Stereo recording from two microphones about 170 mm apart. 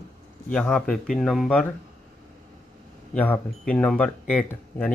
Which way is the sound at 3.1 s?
10° left (ahead or behind).